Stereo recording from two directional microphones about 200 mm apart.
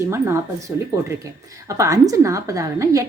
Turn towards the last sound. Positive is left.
turn(degrees=-15)  # may be behind; listen again after turning